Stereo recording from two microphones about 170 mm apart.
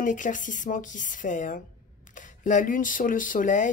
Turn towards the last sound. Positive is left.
turn(degrees=50)  # may be behind; listen again after turning